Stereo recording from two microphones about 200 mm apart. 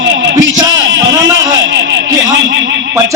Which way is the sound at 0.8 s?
65° right (ahead or behind).